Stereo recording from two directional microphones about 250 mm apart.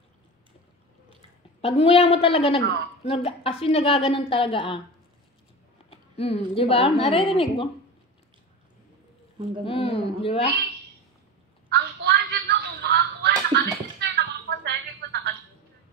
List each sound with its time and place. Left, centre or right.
1.6 s a woman's voice: left
5.9 s a woman's voice: left
9.7 s a woman's voice: left
11.7 s a sound: right